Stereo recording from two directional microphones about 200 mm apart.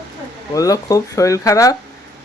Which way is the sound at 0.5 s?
15° left (ahead or behind).